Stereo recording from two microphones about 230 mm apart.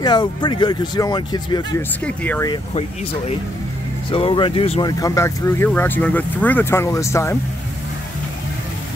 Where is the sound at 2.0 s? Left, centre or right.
Centre.